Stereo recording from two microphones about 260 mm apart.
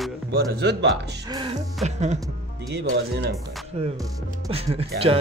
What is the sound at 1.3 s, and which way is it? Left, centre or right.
Music, centre.